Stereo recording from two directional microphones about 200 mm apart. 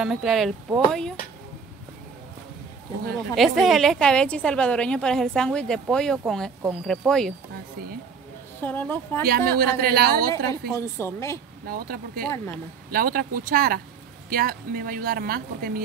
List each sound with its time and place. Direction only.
0.0 s a woman's voice: centre (ahead or behind)
3.3 s a woman's voice: centre (ahead or behind)
8.5 s a woman's voice: 10° left (ahead or behind)
9.2 s speech: 50° right (ahead or behind)
10.7 s a woman's voice: 15° left (ahead or behind)
11.6 s speech: 50° right (ahead or behind)